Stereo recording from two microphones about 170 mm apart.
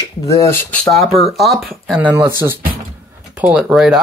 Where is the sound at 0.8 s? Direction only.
Centre (ahead or behind).